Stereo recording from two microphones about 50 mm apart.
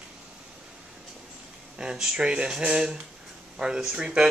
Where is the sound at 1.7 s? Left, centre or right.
Centre.